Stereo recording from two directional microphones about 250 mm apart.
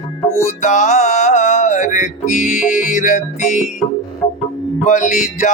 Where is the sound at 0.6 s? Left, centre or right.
Left.